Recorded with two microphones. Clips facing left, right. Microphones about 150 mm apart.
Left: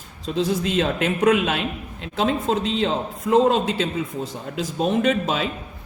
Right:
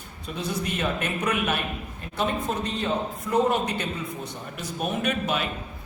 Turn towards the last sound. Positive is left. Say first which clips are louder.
# left 6 dB
turn(degrees=90)